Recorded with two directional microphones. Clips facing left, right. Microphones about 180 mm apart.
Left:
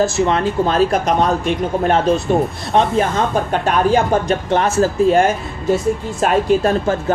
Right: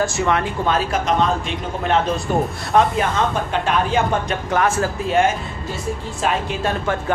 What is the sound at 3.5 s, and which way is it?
Speech, 40° left (ahead or behind).